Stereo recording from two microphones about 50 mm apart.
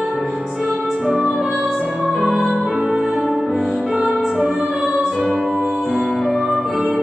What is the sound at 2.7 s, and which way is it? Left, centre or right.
Music, centre.